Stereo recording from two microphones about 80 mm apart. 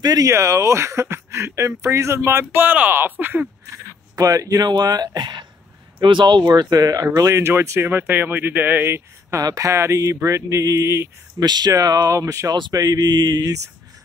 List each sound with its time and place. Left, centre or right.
0.0 s speech: right
0.3 s speech: right
3.7 s a sound: right
4.6 s mantra: right
5.9 s speech: right
6.4 s speech: right
7.2 s speech: right
9.4 s speech: right
11.3 s speech: right
12.7 s mantra: right